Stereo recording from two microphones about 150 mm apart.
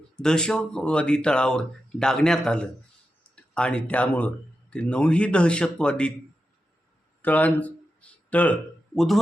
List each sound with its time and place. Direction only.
0.2 s a man's voice: 5° left (ahead or behind)
7.2 s a man's voice: 10° left (ahead or behind)